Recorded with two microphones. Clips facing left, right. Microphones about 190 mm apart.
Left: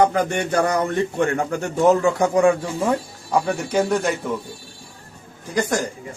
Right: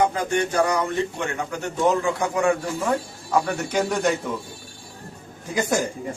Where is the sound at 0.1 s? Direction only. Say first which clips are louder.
Left 2 dB; 60° left (ahead or behind).